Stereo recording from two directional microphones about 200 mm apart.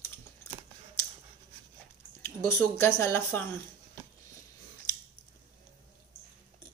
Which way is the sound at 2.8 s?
10° left (ahead or behind).